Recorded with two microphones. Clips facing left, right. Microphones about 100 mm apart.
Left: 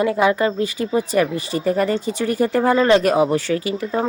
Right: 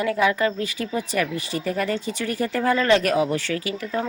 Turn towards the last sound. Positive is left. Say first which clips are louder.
# left 5 dB
turn(degrees=30)  # may be behind; listen again after turning